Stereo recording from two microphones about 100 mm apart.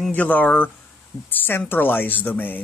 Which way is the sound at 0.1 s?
15° left (ahead or behind).